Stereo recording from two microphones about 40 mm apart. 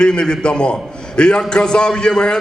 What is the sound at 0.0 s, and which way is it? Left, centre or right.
A man's voice, left.